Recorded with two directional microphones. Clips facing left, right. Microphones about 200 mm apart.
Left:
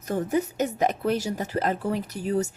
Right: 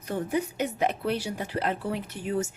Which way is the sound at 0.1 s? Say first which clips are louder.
Left 3 dB; 45° left (ahead or behind).